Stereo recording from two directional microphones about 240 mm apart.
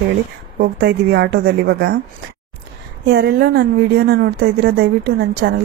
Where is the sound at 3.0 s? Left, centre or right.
Right.